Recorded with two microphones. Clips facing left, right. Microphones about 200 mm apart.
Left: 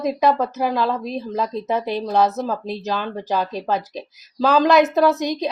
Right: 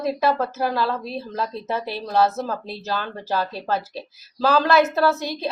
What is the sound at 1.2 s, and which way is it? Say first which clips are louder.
Speech: left 4 dB; 15° left (ahead or behind).